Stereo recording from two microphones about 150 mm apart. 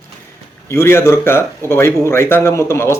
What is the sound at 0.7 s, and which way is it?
Speech, 15° left (ahead or behind).